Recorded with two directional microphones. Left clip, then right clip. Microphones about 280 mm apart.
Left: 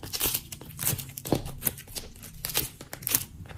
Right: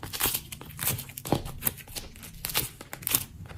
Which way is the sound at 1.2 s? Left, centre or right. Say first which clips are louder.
Even; centre.